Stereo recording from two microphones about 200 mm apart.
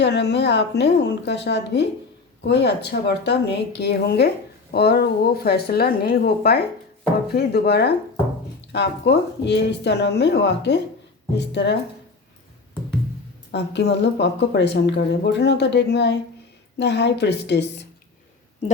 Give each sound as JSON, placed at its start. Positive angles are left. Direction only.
{"t": 0.0, "sound": "speech", "side_deg": 60}
{"t": 13.5, "sound": "speech", "side_deg": 60}